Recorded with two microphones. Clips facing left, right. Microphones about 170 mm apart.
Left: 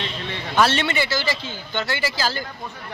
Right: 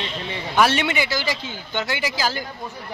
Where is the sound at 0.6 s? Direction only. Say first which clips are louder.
Even; 10° right (ahead or behind).